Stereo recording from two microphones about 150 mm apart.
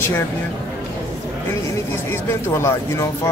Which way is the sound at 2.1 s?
15° left (ahead or behind).